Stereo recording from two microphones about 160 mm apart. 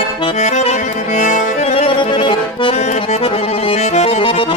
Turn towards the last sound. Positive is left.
turn(degrees=35)  # may be behind; listen again after turning